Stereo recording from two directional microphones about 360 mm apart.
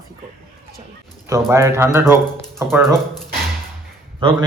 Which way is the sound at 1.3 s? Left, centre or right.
Centre.